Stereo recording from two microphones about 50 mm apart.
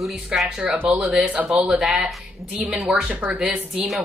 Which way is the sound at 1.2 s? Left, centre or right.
Right.